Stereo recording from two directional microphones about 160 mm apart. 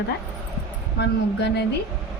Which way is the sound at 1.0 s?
90° left.